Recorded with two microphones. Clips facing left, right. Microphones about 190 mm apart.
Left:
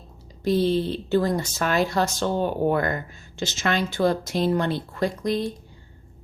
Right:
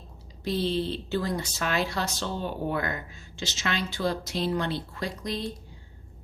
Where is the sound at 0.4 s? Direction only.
45° left (ahead or behind).